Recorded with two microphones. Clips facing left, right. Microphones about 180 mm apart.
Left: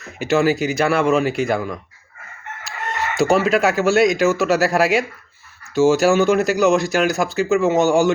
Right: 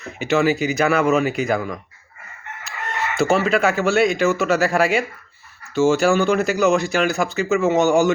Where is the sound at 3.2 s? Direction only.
40° left (ahead or behind).